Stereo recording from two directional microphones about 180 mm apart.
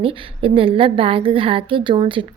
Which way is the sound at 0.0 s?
30° right (ahead or behind).